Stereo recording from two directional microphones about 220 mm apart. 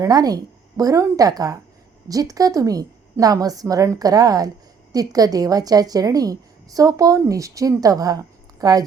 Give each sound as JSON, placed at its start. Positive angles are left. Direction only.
{"t": 0.0, "sound": "a woman's voice", "side_deg": -15}